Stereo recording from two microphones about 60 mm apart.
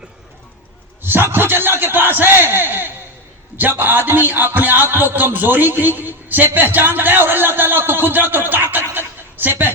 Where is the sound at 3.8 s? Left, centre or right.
Right.